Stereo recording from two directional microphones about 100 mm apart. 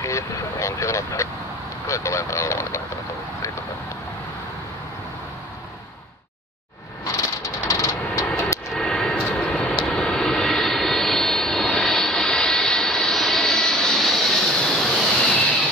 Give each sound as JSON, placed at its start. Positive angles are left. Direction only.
{"t": 0.0, "sound": "vehicle", "side_deg": 30}
{"t": 1.9, "sound": "speech", "side_deg": 30}
{"t": 7.2, "sound": "vehicle", "side_deg": 35}
{"t": 8.7, "sound": "vehicle", "side_deg": 5}